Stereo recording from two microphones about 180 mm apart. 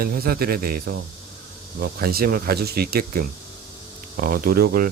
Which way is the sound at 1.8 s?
55° right (ahead or behind).